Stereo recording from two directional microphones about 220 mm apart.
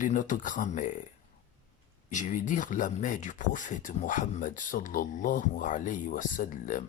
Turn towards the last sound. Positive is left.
turn(degrees=35)  # may be behind; listen again after turning